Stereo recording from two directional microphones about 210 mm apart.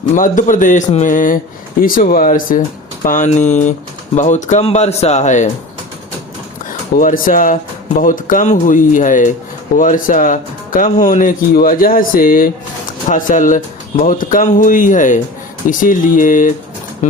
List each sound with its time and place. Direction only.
0.1 s speech: 40° left (ahead or behind)
7.0 s speech: 40° left (ahead or behind)